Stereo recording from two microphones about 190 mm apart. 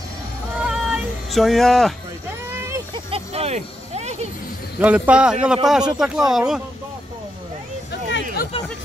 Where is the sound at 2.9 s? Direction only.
30° right (ahead or behind).